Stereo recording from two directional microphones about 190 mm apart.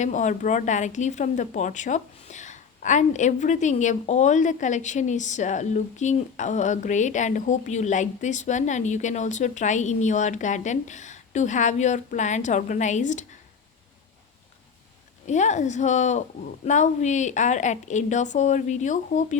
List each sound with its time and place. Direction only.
0.0 s a woman's voice: 40° left (ahead or behind)
15.3 s a woman's voice: 40° left (ahead or behind)